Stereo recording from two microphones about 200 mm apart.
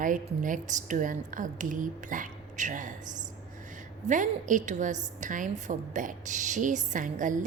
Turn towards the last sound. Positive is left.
turn(degrees=-40)  # may be behind; listen again after turning